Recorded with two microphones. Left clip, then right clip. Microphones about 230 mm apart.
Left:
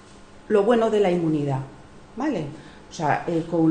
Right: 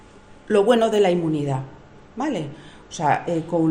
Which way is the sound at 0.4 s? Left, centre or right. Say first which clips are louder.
Right 2 dB; right.